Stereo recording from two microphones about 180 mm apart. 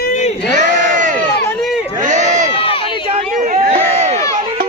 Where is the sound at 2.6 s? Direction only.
30° left (ahead or behind).